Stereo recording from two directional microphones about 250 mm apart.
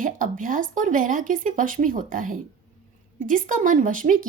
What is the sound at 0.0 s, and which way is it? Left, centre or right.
Speech, right.